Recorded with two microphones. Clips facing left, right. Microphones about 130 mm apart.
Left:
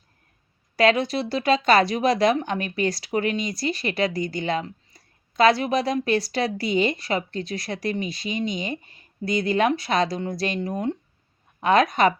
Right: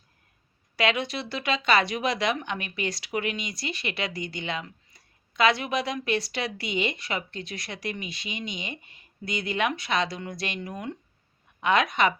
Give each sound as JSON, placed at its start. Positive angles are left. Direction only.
{"t": 0.8, "sound": "speech", "side_deg": 40}